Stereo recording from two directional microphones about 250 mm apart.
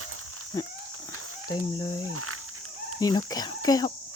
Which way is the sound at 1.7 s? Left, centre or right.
Centre.